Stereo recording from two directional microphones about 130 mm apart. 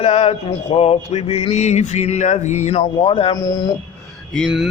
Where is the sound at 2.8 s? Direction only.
40° left (ahead or behind).